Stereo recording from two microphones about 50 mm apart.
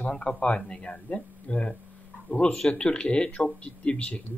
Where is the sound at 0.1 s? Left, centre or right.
Centre.